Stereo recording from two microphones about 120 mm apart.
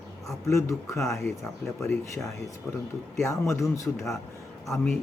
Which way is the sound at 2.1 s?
25° left (ahead or behind).